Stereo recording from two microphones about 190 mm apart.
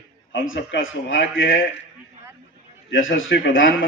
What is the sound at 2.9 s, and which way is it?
Speech, 90° left.